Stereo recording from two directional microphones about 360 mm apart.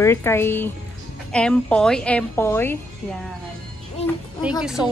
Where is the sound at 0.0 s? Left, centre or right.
Centre.